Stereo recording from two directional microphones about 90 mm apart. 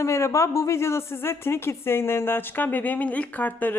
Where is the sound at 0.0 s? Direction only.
35° left (ahead or behind).